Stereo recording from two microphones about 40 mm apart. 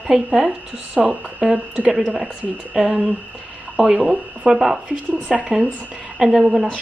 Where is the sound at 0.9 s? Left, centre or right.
Right.